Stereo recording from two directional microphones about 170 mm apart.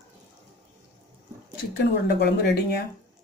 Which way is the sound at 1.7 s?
70° left (ahead or behind).